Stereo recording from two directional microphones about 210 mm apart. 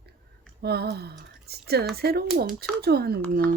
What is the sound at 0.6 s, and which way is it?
Speech, 50° right (ahead or behind).